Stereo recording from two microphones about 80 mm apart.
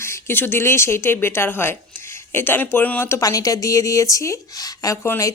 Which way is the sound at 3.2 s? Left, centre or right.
Left.